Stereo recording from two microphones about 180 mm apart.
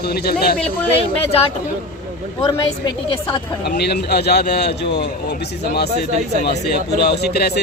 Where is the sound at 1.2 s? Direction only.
35° left (ahead or behind).